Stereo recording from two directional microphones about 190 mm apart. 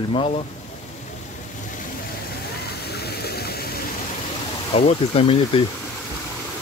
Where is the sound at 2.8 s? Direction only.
55° left (ahead or behind).